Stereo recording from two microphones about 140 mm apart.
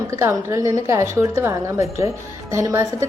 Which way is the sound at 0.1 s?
20° right (ahead or behind).